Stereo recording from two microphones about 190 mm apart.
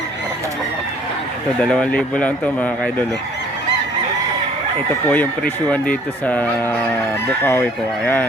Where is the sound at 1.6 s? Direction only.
5° left (ahead or behind).